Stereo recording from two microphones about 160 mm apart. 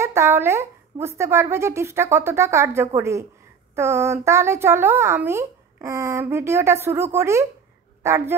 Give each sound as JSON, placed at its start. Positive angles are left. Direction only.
{"t": 0.0, "sound": "a woman's voice", "side_deg": -15}